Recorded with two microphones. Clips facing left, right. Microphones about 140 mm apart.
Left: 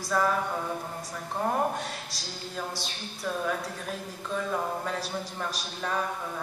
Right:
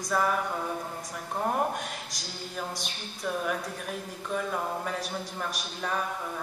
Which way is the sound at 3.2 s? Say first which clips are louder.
Even; 15° right (ahead or behind).